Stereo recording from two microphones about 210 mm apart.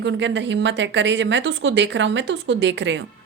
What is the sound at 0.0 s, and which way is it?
A woman's voice, 55° right (ahead or behind).